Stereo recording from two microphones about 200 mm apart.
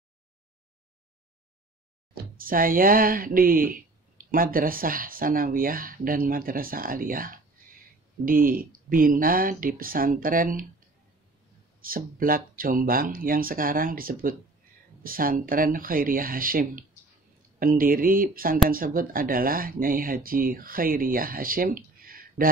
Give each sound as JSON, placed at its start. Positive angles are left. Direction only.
{"t": 2.3, "sound": "speech", "side_deg": -45}
{"t": 11.8, "sound": "speech", "side_deg": -45}